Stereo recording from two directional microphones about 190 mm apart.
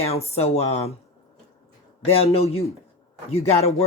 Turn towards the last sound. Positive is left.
turn(degrees=35)  # may be behind; listen again after turning